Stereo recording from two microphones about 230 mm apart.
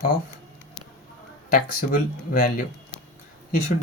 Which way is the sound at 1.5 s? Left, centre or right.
Left.